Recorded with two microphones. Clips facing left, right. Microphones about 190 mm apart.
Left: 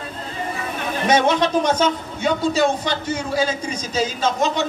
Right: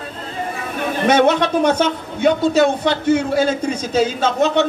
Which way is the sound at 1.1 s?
60° right (ahead or behind).